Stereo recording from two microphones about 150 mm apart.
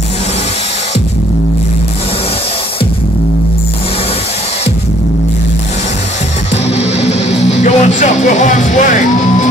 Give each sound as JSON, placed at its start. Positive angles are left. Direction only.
{"t": 6.5, "sound": "music", "side_deg": 45}